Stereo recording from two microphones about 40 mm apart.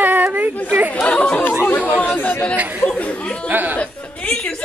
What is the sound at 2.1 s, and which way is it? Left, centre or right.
Speech, left.